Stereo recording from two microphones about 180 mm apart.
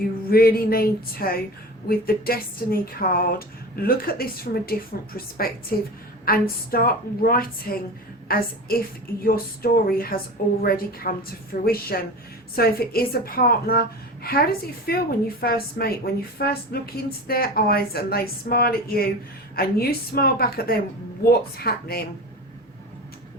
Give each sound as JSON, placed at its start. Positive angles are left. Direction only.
{"t": 0.3, "sound": "a woman's voice", "side_deg": 55}